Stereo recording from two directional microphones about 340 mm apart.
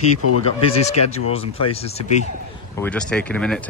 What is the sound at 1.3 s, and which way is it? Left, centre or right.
Speech, centre.